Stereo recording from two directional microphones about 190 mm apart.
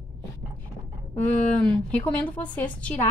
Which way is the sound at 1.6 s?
5° left (ahead or behind).